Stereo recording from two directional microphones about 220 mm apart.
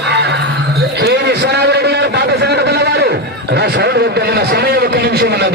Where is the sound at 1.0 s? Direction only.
50° right (ahead or behind).